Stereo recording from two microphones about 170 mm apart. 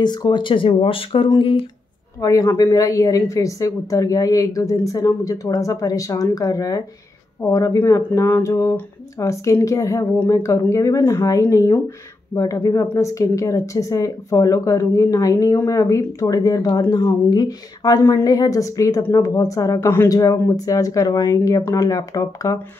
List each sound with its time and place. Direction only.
0.0 s speech: 25° left (ahead or behind)